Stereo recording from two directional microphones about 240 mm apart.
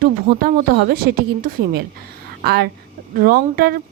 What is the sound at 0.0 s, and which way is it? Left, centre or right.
Speech, right.